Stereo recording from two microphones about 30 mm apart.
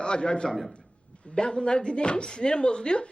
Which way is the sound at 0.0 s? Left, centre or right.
Left.